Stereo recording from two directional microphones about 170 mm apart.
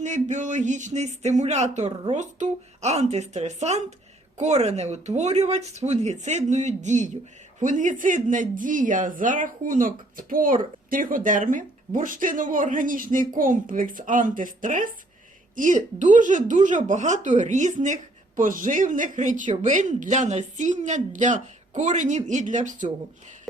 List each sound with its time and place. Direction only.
0.0 s a woman's voice: 45° right (ahead or behind)